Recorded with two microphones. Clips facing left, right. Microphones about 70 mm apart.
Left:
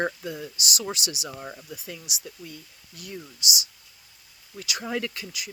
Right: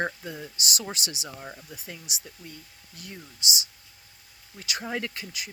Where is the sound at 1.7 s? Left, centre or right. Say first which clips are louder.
Left 3 dB; right.